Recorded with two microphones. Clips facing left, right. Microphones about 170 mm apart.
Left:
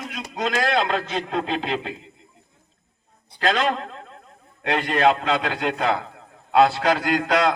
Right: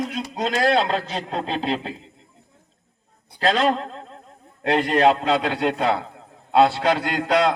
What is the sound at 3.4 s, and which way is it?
A man's voice, 35° right (ahead or behind).